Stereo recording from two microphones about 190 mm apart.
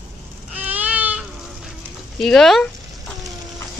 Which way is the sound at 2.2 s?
Centre (ahead or behind).